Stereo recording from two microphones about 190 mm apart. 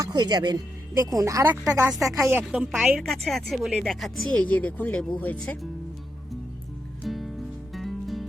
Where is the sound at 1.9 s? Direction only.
Centre (ahead or behind).